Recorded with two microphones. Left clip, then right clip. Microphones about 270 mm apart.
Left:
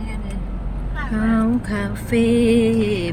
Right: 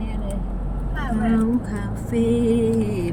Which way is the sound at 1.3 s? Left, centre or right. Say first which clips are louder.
Left 2 dB; left.